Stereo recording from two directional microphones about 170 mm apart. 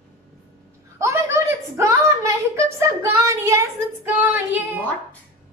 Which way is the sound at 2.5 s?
15° right (ahead or behind).